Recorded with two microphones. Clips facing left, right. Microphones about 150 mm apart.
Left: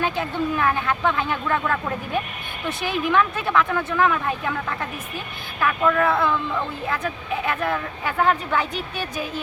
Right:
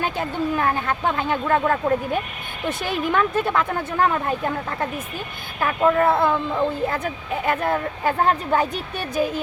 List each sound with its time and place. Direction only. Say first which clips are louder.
0.2 s speech: even; 35° right (ahead or behind)